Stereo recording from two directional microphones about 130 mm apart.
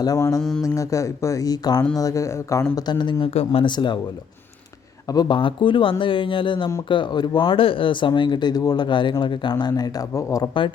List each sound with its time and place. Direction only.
0.0 s speech: 25° left (ahead or behind)
2.7 s speech: 35° left (ahead or behind)
5.1 s speech: 40° left (ahead or behind)